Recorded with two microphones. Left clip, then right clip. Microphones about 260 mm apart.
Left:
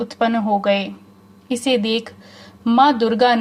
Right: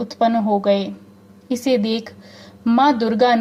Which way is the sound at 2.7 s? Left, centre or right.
Left.